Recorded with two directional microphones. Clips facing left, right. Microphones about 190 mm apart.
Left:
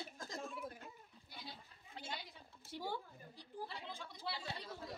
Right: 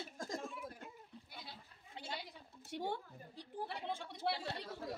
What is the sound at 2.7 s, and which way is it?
A woman's voice, 70° right (ahead or behind).